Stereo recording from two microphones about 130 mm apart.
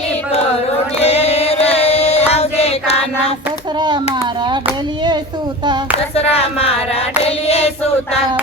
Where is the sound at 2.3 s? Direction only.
50° left (ahead or behind).